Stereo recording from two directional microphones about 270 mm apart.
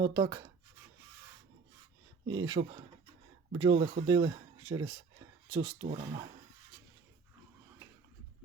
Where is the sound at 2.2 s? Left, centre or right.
Centre.